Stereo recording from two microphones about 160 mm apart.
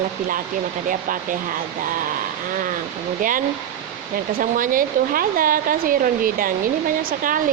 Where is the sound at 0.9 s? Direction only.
55° right (ahead or behind).